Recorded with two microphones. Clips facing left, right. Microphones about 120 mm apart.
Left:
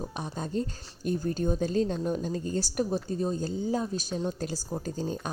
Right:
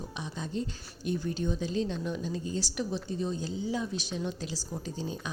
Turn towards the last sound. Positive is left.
turn(degrees=45)  # may be behind; listen again after turning